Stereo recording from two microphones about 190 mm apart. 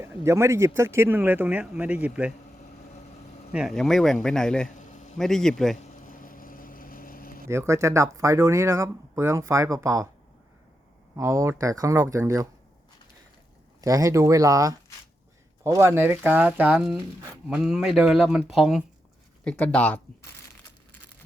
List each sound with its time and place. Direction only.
0.0 s speech: 15° right (ahead or behind)
3.5 s speech: centre (ahead or behind)
4.7 s a sound: 40° left (ahead or behind)
5.1 s speech: centre (ahead or behind)
5.7 s a sound: 45° left (ahead or behind)
7.4 s speech: 15° right (ahead or behind)
11.2 s speech: 15° right (ahead or behind)
13.8 s speech: 15° right (ahead or behind); by 20.0 s 5° left (ahead or behind)